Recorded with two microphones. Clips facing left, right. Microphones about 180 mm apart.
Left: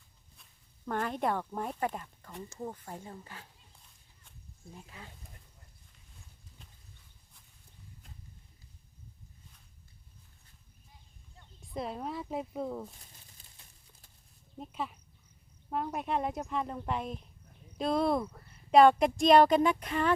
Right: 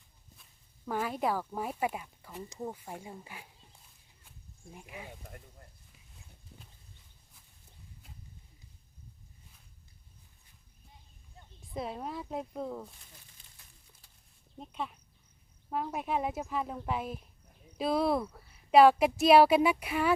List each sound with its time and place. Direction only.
0.9 s speech: 5° right (ahead or behind)
4.7 s speech: 15° right (ahead or behind)
5.2 s a sound: 60° right (ahead or behind)
11.6 s speech: centre (ahead or behind)
14.6 s speech: centre (ahead or behind)